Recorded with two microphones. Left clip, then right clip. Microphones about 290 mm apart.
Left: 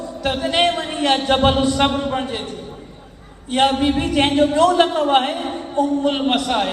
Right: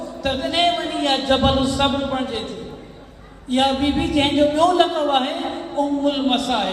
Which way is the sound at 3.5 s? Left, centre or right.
Left.